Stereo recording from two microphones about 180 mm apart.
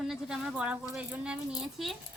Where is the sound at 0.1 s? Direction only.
Centre (ahead or behind).